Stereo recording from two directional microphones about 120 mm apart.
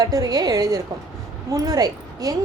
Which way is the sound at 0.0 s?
30° right (ahead or behind).